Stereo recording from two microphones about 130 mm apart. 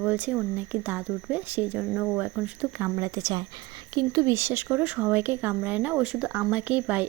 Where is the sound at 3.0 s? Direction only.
25° right (ahead or behind).